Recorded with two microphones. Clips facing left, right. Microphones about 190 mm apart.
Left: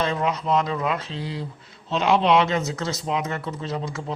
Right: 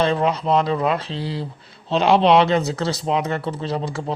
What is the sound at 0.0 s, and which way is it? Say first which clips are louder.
Speech: right 5 dB; 30° right (ahead or behind).